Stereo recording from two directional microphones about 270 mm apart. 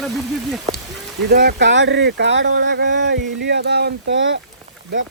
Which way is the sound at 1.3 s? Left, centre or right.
Right.